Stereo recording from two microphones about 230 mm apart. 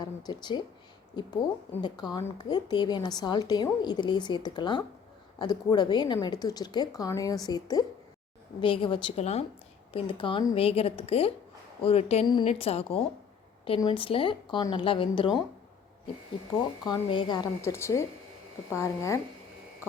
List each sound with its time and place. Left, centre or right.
0.0 s speech: centre
16.8 s speech: centre